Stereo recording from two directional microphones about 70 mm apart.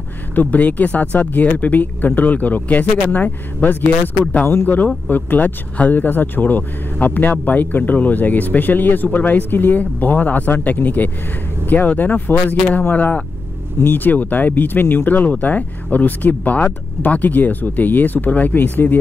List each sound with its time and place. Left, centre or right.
0.3 s speech: left